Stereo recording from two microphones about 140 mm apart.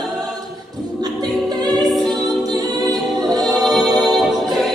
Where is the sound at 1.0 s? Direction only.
30° right (ahead or behind).